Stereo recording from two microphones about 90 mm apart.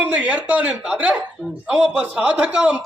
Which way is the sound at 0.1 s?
15° right (ahead or behind).